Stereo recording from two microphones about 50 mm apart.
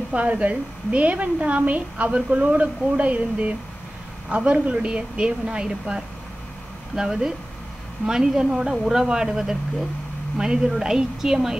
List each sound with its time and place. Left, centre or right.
0.1 s a woman's voice: right; by 11.5 s centre